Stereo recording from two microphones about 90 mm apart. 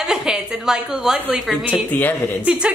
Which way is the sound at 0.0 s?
5° right (ahead or behind).